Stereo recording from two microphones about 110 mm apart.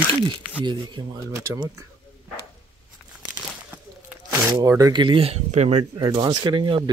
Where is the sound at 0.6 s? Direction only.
45° right (ahead or behind).